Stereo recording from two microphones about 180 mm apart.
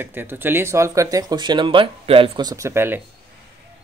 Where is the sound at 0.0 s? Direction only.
10° right (ahead or behind).